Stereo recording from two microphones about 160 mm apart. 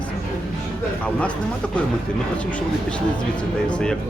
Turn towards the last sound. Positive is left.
turn(degrees=5)  # may be behind; listen again after turning